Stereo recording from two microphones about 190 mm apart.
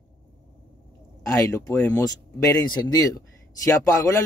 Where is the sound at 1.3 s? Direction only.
15° left (ahead or behind).